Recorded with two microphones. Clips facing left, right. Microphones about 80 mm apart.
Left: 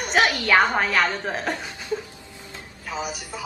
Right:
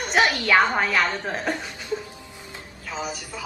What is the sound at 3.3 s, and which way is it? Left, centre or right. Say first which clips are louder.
Speech: left 1 dB; centre.